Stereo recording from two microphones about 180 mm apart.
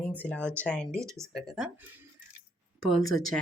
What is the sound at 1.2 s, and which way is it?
Speech, 20° right (ahead or behind).